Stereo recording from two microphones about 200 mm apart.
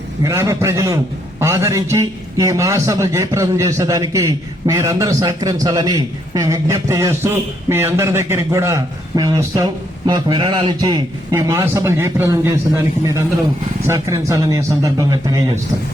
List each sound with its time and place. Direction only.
0.3 s a man's voice: 15° right (ahead or behind)